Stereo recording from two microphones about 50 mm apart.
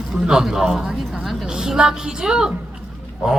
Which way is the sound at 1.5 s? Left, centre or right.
Centre.